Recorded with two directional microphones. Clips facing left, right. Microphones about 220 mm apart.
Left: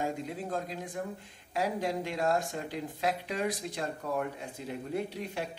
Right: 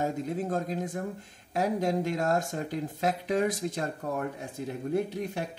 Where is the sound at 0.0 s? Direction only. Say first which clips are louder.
Right 4 dB; 45° right (ahead or behind).